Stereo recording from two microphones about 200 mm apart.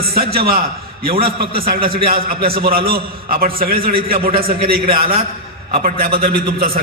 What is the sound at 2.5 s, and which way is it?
Speech, 50° right (ahead or behind).